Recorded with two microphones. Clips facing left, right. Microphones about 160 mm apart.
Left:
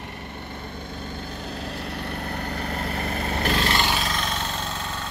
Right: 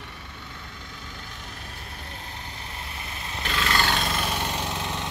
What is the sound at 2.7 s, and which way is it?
Vehicle, 60° left (ahead or behind).